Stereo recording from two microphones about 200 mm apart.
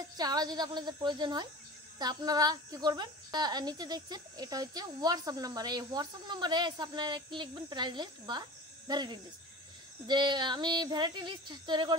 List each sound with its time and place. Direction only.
0.2 s speech: 20° right (ahead or behind)